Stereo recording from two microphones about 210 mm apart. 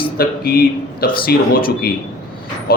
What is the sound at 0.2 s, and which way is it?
A man's voice, 45° left (ahead or behind).